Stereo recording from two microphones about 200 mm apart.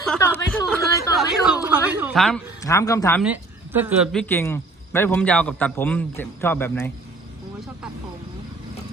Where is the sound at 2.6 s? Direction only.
15° left (ahead or behind).